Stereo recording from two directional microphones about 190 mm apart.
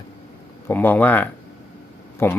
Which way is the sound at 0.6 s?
10° left (ahead or behind).